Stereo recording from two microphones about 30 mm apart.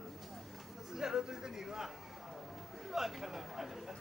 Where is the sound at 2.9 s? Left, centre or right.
Centre.